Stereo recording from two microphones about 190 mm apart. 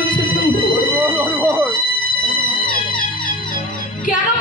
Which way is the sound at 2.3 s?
45° left (ahead or behind).